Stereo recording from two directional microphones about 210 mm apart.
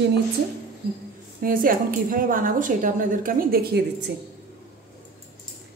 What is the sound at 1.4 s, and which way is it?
A woman's voice, 40° right (ahead or behind).